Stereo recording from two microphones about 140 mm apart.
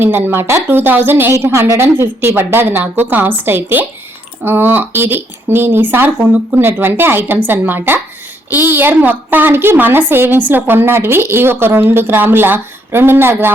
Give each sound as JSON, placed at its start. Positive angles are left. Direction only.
{"t": 0.0, "sound": "a woman's voice", "side_deg": -15}